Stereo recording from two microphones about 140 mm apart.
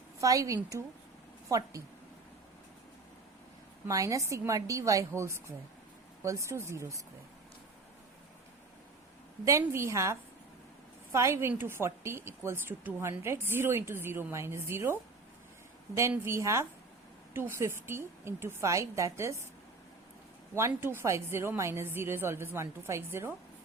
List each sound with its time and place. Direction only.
0.2 s a woman's voice: 25° right (ahead or behind)
3.8 s a woman's voice: 25° right (ahead or behind)
9.4 s a woman's voice: 20° right (ahead or behind)
16.0 s a woman's voice: 20° right (ahead or behind)
20.6 s a woman's voice: 20° right (ahead or behind)